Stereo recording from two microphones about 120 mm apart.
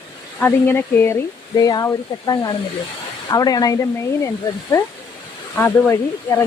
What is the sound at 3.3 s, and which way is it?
Speech, 30° left (ahead or behind).